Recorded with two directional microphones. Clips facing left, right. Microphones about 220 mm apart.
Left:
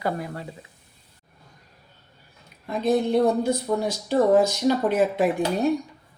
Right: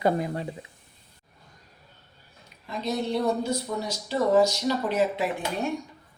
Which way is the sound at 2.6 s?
50° left (ahead or behind).